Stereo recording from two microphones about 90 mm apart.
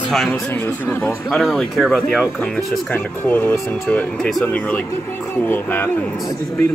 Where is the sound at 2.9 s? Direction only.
20° left (ahead or behind).